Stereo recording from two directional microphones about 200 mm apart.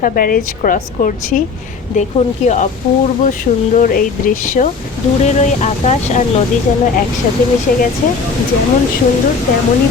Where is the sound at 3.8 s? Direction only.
40° left (ahead or behind).